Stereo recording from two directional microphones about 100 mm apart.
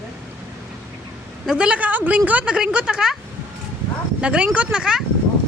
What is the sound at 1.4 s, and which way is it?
A woman's voice, 10° right (ahead or behind).